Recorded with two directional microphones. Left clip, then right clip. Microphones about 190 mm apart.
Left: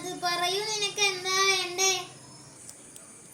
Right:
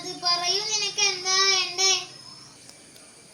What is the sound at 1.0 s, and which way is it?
Child singing, centre (ahead or behind).